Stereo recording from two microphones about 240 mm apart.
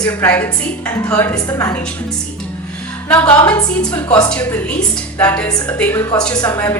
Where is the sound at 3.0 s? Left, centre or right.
Centre.